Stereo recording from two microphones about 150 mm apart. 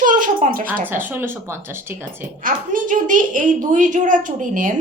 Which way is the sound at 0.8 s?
15° right (ahead or behind).